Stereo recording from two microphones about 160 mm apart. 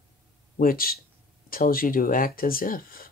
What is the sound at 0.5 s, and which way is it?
Speech, 65° left (ahead or behind).